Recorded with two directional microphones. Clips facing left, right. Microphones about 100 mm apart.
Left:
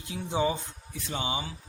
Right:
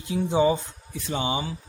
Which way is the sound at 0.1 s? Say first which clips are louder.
Right 11 dB; 35° right (ahead or behind).